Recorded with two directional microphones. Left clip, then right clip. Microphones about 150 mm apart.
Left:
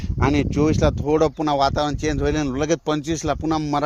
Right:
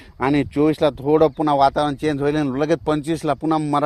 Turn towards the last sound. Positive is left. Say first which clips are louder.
# right 3 dB
turn(degrees=-30)  # may be behind; listen again after turning